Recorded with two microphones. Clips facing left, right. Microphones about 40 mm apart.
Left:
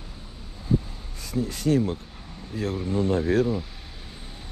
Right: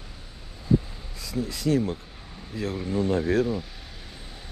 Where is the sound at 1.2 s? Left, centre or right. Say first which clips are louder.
Left 2 dB; left.